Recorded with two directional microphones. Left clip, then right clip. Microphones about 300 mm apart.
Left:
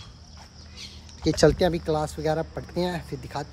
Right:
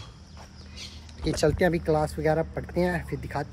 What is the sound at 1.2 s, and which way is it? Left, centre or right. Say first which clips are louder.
Speech: left 5 dB; left.